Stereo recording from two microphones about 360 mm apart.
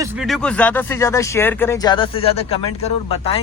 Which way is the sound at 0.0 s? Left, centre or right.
Centre.